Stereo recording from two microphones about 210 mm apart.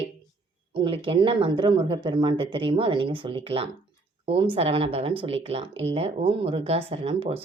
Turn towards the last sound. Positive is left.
turn(degrees=-25)  # may be behind; listen again after turning